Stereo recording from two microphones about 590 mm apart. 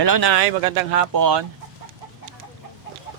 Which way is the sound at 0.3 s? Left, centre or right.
Right.